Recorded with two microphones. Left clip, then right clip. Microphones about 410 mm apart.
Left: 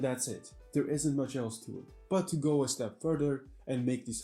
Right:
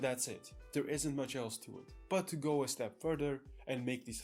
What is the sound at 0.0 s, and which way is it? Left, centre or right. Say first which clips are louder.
Speech: left 3 dB; right.